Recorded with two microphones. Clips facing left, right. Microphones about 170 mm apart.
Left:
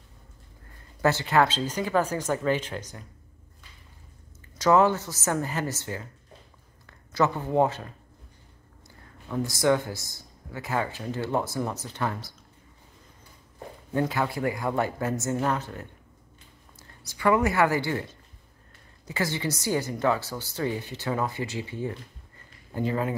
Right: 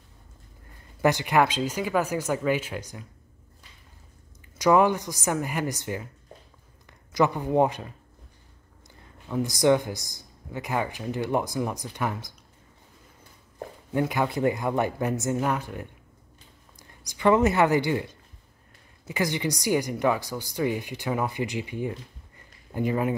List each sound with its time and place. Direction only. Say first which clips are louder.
1.0 s speech: right 1 dB; 15° right (ahead or behind)
4.6 s speech: even; 15° right (ahead or behind)
9.3 s speech: right 2 dB; 15° right (ahead or behind)
13.9 s a woman's voice: right 1 dB; 15° right (ahead or behind)